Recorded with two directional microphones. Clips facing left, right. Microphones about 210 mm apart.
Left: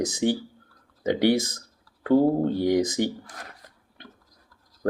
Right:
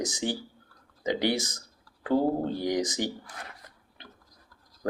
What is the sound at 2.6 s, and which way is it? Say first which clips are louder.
Speech: left 6 dB; 55° left (ahead or behind).